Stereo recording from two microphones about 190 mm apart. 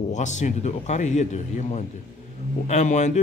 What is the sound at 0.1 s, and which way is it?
A man's voice, 40° left (ahead or behind).